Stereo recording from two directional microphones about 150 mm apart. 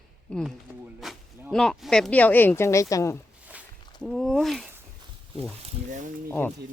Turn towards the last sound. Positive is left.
turn(degrees=15)  # may be behind; listen again after turning